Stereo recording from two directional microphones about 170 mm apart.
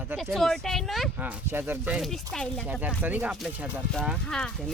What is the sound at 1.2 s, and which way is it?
Speech, 10° right (ahead or behind).